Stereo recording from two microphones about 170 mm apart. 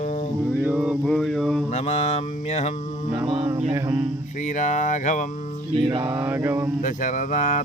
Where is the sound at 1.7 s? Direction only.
40° left (ahead or behind).